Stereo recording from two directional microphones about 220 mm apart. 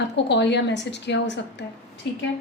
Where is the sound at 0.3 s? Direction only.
55° left (ahead or behind).